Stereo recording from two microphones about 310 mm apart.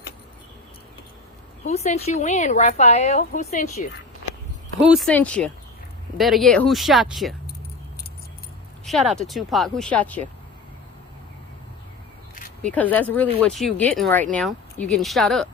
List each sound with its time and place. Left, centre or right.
1.6 s speech: left
4.8 s speech: centre
8.8 s speech: centre
12.6 s speech: centre